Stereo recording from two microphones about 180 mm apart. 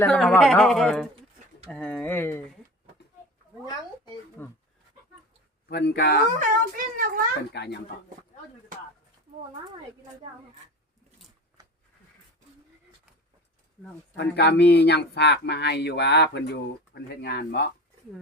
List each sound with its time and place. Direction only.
0.0 s speech: 5° left (ahead or behind)
4.4 s speech: 10° left (ahead or behind)
5.6 s speech: 65° left (ahead or behind)
6.4 s speech: 50° right (ahead or behind)
7.5 s speech: 70° left (ahead or behind)
11.6 s a sound: 20° right (ahead or behind)
14.2 s speech: 70° left (ahead or behind)